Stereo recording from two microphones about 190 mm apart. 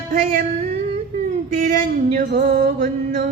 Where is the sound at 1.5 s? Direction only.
45° right (ahead or behind).